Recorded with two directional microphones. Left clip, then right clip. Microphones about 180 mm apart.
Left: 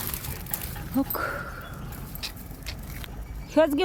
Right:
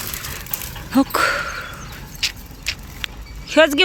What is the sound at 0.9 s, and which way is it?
Speech, 25° right (ahead or behind).